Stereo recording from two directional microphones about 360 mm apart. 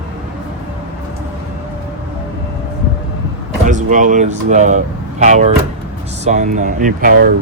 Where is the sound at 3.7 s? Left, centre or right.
Right.